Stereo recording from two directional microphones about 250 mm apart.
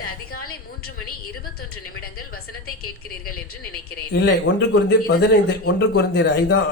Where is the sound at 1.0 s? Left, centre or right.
Left.